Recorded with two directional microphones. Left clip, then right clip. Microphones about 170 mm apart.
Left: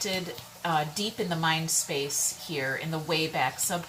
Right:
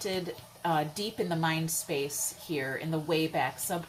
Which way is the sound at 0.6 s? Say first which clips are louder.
Left 2 dB; 15° right (ahead or behind).